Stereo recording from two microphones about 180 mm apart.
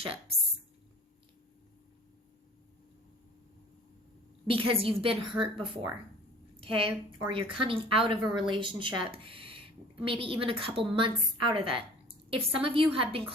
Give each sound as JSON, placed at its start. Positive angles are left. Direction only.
{"t": 0.0, "sound": "speech", "side_deg": -30}
{"t": 4.4, "sound": "a woman's voice", "side_deg": -30}